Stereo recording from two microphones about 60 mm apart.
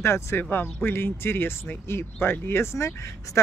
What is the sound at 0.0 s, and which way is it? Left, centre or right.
Speech, left.